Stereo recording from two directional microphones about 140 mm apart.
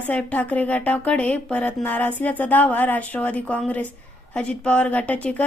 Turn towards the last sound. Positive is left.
turn(degrees=10)  # may be behind; listen again after turning